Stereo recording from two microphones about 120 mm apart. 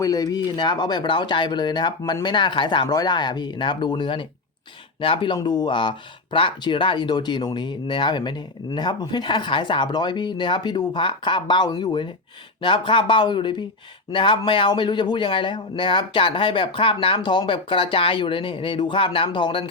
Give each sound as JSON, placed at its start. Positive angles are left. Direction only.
{"t": 0.0, "sound": "speech", "side_deg": 30}